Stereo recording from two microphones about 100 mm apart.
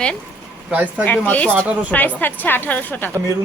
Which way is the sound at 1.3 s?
15° left (ahead or behind).